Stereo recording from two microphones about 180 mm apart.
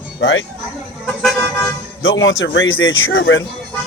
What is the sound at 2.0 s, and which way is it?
A man's voice, 90° left.